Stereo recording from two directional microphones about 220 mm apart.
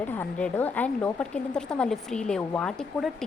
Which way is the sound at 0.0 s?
5° left (ahead or behind).